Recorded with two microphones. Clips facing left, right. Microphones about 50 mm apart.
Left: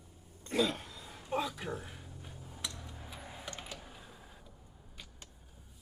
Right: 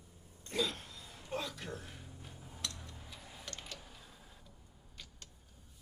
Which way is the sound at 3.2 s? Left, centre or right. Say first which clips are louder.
Left 5 dB; left.